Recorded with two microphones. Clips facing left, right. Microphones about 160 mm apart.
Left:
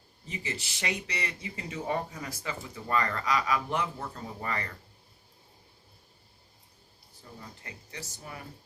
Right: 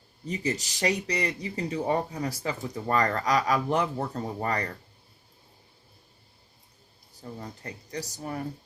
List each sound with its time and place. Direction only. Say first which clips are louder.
0.3 s speech: right 8 dB; 40° right (ahead or behind)
7.2 s speech: right 8 dB; 40° right (ahead or behind)